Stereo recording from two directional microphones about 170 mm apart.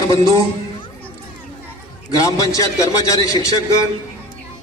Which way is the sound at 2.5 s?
20° left (ahead or behind).